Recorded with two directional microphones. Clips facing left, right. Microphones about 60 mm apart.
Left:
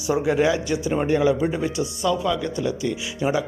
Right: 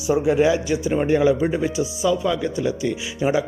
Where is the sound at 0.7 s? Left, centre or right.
Centre.